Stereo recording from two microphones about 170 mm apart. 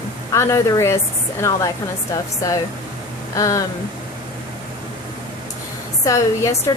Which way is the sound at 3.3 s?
20° left (ahead or behind).